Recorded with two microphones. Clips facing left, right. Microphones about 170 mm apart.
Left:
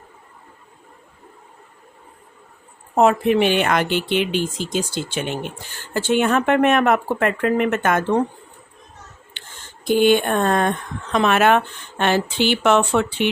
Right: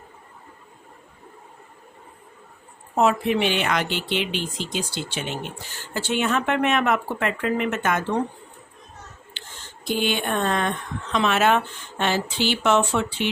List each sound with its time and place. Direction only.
2.9 s speech: 50° left (ahead or behind)
9.8 s speech: 50° left (ahead or behind)